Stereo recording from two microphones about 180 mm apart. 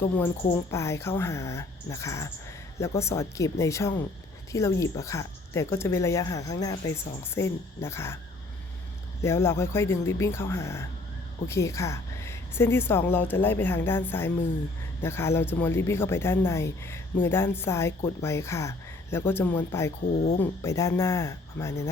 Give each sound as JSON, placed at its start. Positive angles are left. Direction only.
{"t": 0.7, "sound": "speech", "side_deg": 15}
{"t": 9.2, "sound": "speech", "side_deg": 15}